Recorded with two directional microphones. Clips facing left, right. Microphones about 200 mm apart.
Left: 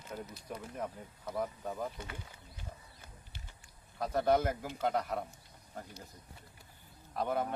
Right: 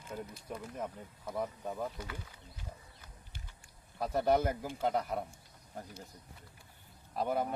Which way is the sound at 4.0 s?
5° right (ahead or behind).